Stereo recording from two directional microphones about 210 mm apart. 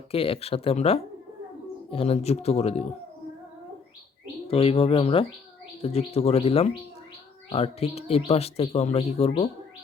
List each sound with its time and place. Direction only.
0.1 s speech: 25° left (ahead or behind)
4.4 s speech: 25° left (ahead or behind)